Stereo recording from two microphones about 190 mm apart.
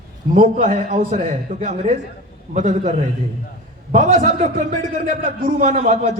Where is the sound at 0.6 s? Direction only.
40° right (ahead or behind).